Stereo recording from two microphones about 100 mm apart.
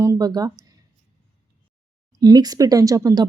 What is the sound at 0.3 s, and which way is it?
Speech, 40° right (ahead or behind).